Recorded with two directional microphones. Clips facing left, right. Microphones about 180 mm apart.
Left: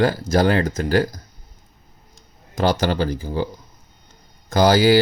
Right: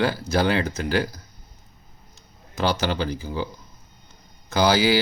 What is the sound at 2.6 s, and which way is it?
Speech, 45° left (ahead or behind).